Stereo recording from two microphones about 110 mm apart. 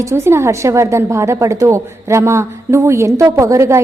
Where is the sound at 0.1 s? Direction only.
25° right (ahead or behind).